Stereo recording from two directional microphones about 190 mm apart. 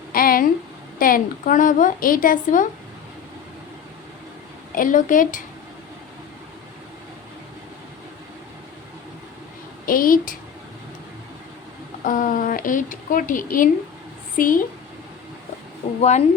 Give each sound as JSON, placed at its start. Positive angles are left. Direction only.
{"t": 0.1, "sound": "a sound", "side_deg": 50}
{"t": 0.9, "sound": "a woman's voice", "side_deg": 50}
{"t": 4.7, "sound": "a woman's voice", "side_deg": 45}
{"t": 9.8, "sound": "a woman's voice", "side_deg": 50}
{"t": 12.0, "sound": "a woman's voice", "side_deg": 45}
{"t": 16.0, "sound": "speech", "side_deg": 35}